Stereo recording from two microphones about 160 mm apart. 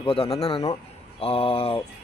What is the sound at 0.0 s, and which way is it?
Speech, 35° left (ahead or behind).